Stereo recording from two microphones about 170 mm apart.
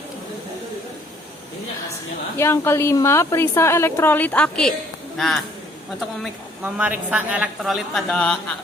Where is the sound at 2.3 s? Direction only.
15° left (ahead or behind).